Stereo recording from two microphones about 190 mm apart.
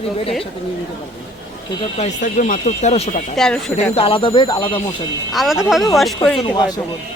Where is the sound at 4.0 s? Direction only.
30° left (ahead or behind).